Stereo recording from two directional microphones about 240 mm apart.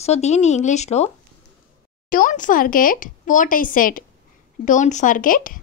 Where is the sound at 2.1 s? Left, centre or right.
Left.